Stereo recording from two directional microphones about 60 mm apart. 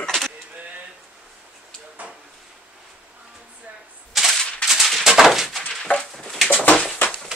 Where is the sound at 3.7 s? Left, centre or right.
Right.